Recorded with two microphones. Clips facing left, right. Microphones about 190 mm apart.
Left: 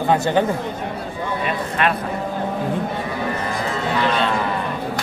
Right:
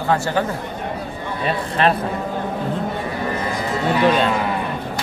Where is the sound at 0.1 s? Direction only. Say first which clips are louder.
Left 2 dB; 20° left (ahead or behind).